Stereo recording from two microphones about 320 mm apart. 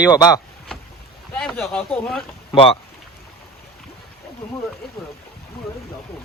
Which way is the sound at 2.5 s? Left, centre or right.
Centre.